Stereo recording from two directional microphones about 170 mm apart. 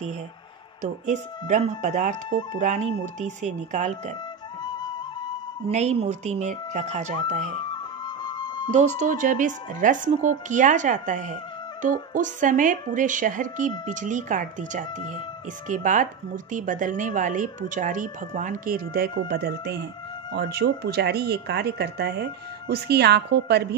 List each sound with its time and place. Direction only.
1.0 s speech: 45° right (ahead or behind)
4.6 s music: 25° left (ahead or behind)
5.7 s speech: 40° right (ahead or behind)
7.7 s music: 25° left (ahead or behind)
8.7 s speech: 50° right (ahead or behind); by 23.7 s 75° right (ahead or behind)